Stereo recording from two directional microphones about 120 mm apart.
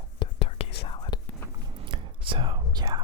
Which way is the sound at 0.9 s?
35° left (ahead or behind).